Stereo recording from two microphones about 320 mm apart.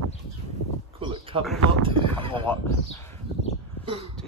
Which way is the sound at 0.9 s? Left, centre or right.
Centre.